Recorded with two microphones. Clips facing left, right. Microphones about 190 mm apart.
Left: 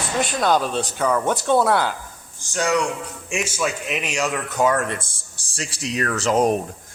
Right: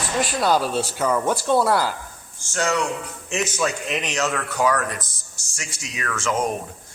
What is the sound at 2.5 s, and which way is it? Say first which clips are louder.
Speech: left 2 dB; 15° left (ahead or behind).